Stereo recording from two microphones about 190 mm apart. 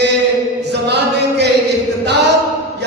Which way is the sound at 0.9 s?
60° right (ahead or behind).